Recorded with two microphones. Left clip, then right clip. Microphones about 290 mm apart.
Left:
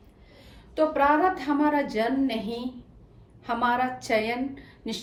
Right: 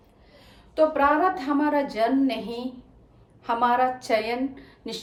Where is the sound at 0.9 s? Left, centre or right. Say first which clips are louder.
Right 1 dB; centre.